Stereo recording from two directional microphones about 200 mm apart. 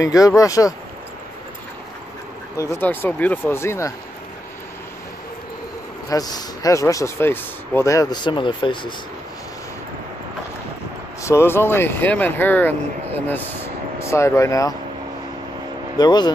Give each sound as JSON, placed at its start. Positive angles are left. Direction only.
{"t": 0.0, "sound": "speech", "side_deg": 15}
{"t": 2.5, "sound": "speech", "side_deg": 15}
{"t": 6.0, "sound": "speech", "side_deg": 20}
{"t": 11.2, "sound": "speech", "side_deg": 10}
{"t": 16.0, "sound": "speech", "side_deg": 20}